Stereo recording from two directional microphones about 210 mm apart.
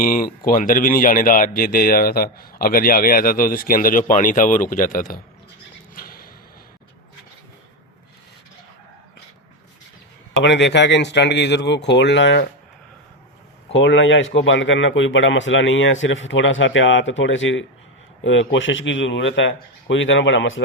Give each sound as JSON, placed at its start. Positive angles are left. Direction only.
{"t": 0.0, "sound": "speech", "side_deg": 45}
{"t": 5.9, "sound": "a sound", "side_deg": 45}
{"t": 10.4, "sound": "speech", "side_deg": 55}
{"t": 13.7, "sound": "speech", "side_deg": 60}